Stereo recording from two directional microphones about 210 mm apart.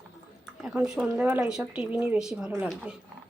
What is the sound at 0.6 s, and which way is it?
Speech, 5° right (ahead or behind).